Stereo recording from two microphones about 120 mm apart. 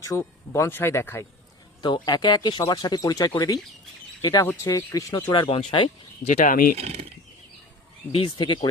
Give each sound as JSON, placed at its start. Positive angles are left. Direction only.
{"t": 0.1, "sound": "speech", "side_deg": 25}
{"t": 1.8, "sound": "speech", "side_deg": 40}
{"t": 6.2, "sound": "speech", "side_deg": 90}
{"t": 6.7, "sound": "speech", "side_deg": -60}
{"t": 8.4, "sound": "speech", "side_deg": 40}